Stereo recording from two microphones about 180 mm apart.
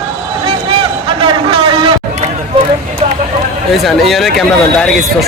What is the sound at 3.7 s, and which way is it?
Speech, centre (ahead or behind).